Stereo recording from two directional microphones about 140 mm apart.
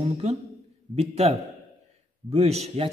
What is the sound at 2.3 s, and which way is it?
Speech, 50° right (ahead or behind).